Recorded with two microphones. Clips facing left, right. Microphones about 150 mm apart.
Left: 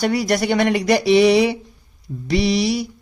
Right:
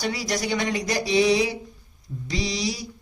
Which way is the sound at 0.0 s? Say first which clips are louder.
Left 8 dB; 55° left (ahead or behind).